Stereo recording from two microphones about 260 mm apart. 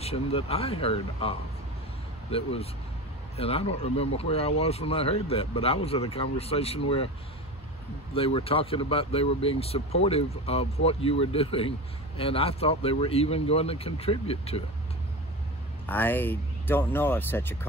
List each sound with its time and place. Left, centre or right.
0.0 s speech: left
2.3 s speech: left
8.1 s speech: left
15.9 s speech: centre